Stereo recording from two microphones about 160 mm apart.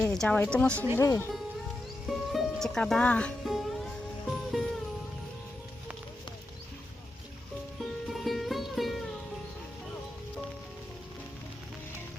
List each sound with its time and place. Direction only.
0.1 s speech: 5° left (ahead or behind)
2.0 s speech: centre (ahead or behind)
4.3 s music: centre (ahead or behind)
8.0 s music: centre (ahead or behind)